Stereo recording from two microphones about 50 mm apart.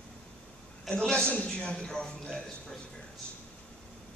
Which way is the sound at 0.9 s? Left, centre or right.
Centre.